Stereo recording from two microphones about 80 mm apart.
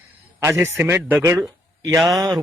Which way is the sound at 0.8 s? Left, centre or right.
Right.